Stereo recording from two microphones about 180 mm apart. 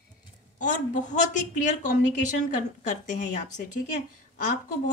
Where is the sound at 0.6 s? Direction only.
45° left (ahead or behind).